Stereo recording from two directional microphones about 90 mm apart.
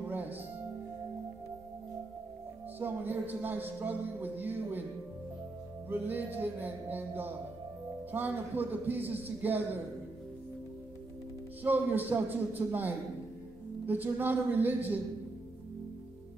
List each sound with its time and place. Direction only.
0.1 s music: 20° right (ahead or behind)
2.8 s speech: 20° right (ahead or behind)
5.9 s speech: 20° right (ahead or behind)
11.6 s speech: 20° right (ahead or behind)